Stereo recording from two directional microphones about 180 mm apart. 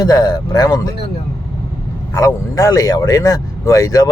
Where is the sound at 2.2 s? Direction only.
15° left (ahead or behind).